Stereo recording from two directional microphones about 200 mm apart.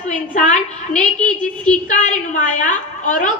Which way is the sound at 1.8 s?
40° left (ahead or behind).